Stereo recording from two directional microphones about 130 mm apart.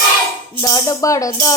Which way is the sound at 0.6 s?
25° left (ahead or behind).